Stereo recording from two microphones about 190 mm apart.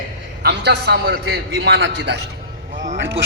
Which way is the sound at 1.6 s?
75° right (ahead or behind).